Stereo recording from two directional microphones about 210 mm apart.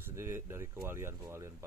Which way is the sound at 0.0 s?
10° right (ahead or behind).